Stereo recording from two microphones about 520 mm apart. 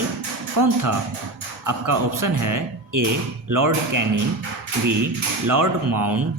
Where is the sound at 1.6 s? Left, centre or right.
Right.